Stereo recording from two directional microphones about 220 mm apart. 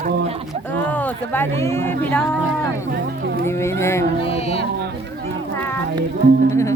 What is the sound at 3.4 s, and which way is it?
Speech, 10° left (ahead or behind).